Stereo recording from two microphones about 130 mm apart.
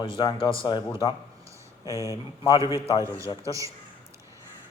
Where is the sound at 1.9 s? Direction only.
25° right (ahead or behind).